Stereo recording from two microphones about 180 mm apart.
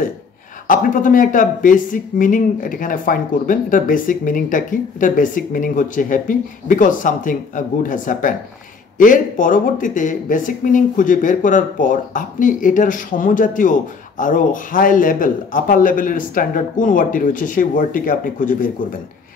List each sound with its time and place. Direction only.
0.7 s speech: 45° left (ahead or behind)